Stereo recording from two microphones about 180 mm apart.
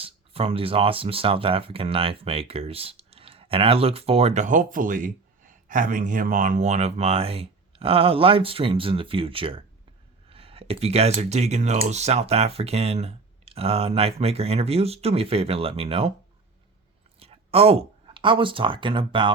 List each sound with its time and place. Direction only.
0.0 s speech: 30° right (ahead or behind)
17.2 s speech: 35° right (ahead or behind)